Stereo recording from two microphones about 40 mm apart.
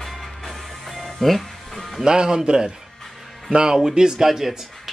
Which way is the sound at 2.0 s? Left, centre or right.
Centre.